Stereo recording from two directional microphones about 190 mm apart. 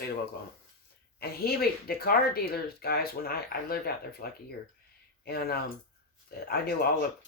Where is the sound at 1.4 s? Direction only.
55° left (ahead or behind).